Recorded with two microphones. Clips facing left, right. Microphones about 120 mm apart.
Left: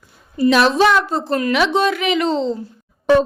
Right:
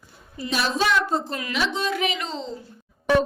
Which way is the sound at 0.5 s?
85° left.